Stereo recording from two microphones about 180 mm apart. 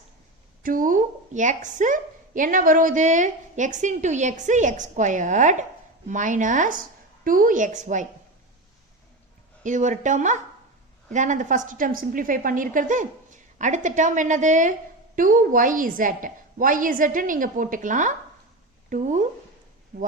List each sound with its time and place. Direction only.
0.6 s a woman's voice: 50° right (ahead or behind)
9.6 s a woman's voice: 45° right (ahead or behind)